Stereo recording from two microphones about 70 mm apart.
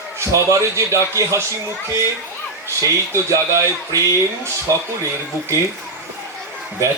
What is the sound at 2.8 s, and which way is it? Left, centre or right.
A man's voice, right.